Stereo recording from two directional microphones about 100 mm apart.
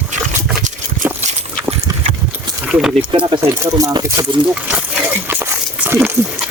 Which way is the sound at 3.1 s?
55° right (ahead or behind).